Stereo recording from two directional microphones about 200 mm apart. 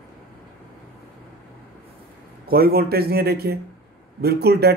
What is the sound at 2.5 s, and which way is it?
Speech, 50° right (ahead or behind).